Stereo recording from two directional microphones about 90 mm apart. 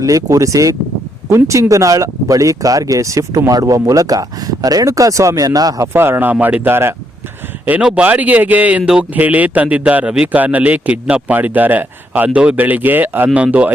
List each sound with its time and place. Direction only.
0.0 s speech: 40° right (ahead or behind)
5.9 s speech: 25° right (ahead or behind)
7.6 s a man's voice: 15° right (ahead or behind)